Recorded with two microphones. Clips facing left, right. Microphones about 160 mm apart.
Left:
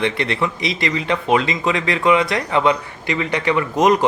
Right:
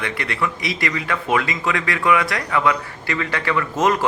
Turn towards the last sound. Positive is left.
turn(degrees=20)  # may be behind; listen again after turning